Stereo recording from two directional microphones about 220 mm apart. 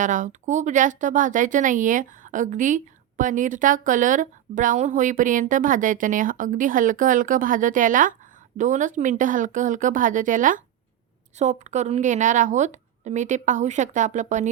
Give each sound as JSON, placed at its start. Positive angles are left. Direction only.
{"t": 0.0, "sound": "speech", "side_deg": -35}